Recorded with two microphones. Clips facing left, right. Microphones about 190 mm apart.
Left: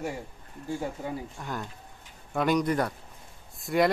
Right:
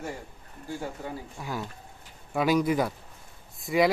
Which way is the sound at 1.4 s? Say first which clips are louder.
Right 1 dB; 5° right (ahead or behind).